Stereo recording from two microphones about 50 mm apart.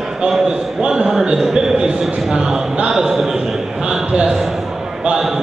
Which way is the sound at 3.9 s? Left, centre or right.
Centre.